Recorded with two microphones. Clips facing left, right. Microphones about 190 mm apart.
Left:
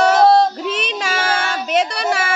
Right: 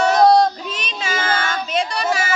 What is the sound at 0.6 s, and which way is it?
Child singing, 70° left (ahead or behind).